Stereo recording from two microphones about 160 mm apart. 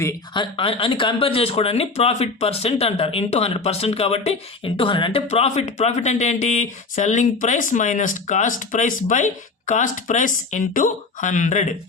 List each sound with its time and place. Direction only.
0.3 s speech: 35° left (ahead or behind); by 11.7 s 50° left (ahead or behind)